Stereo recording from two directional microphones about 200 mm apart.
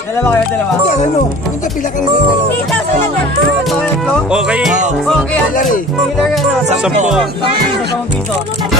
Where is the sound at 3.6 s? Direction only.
Centre (ahead or behind).